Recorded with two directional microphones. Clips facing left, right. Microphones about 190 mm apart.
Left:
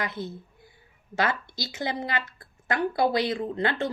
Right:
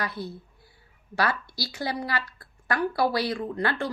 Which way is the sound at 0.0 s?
20° left (ahead or behind).